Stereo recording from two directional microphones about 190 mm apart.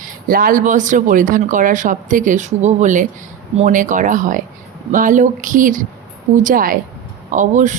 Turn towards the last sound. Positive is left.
turn(degrees=-40)  # may be behind; listen again after turning